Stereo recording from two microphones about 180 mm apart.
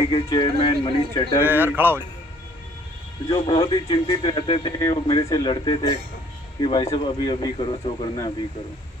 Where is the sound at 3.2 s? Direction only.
30° left (ahead or behind).